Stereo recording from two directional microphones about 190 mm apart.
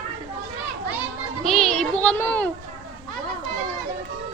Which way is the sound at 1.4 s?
Centre (ahead or behind).